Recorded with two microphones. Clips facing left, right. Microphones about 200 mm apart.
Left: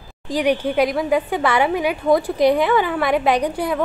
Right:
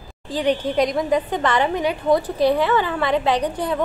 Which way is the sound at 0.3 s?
10° left (ahead or behind).